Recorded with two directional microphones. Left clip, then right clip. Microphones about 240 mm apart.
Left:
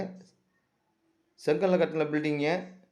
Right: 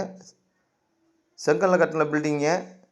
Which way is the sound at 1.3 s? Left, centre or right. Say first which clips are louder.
Right 5 dB; centre.